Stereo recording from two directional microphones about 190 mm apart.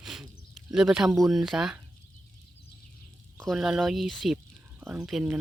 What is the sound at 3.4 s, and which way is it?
Speech, centre (ahead or behind).